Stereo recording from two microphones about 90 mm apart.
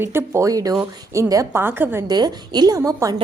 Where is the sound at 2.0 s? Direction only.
50° right (ahead or behind).